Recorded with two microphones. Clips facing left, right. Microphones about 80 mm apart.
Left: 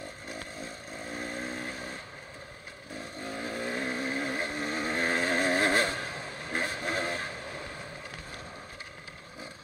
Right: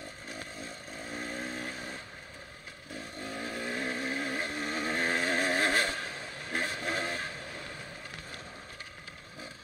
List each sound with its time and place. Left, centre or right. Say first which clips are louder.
1.1 s vehicle: left 1 dB; left
3.3 s vehicle: left 2 dB; left